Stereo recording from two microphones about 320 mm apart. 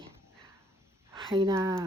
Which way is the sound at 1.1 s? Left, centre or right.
Centre.